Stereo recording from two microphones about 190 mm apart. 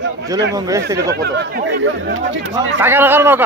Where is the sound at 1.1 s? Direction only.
60° right (ahead or behind).